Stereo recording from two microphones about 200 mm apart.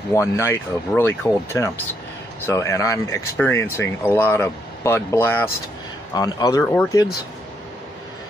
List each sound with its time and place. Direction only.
0.1 s speech: 15° left (ahead or behind)
6.6 s speech: 5° left (ahead or behind)